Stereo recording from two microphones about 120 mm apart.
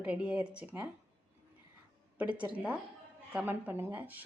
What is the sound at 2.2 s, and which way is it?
Speech, 10° right (ahead or behind).